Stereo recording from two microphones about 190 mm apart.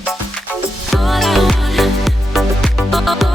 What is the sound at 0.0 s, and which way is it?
Music, centre (ahead or behind).